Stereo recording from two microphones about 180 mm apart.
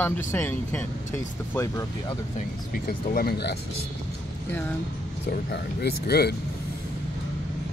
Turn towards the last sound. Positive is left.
turn(degrees=60)  # may be behind; listen again after turning